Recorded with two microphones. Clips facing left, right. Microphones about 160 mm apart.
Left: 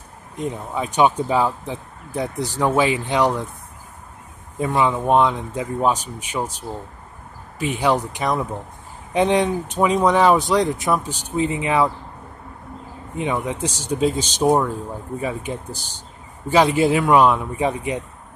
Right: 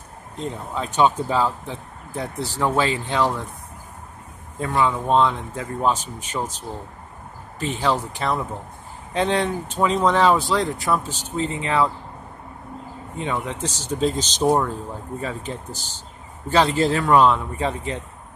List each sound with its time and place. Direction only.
0.4 s speech: 15° left (ahead or behind)
4.6 s speech: 20° left (ahead or behind)
7.5 s speech: 10° left (ahead or behind)
13.2 s speech: 15° left (ahead or behind)